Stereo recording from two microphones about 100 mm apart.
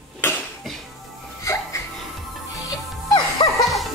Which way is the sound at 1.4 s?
30° left (ahead or behind).